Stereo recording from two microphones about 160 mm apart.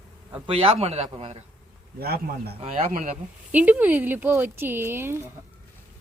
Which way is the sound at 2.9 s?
55° right (ahead or behind).